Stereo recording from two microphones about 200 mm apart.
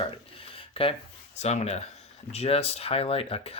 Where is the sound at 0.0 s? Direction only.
25° left (ahead or behind).